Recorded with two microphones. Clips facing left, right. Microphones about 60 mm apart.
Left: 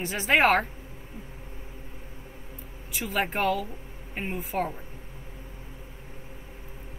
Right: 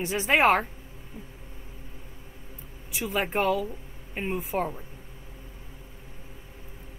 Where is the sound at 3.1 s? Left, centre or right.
Centre.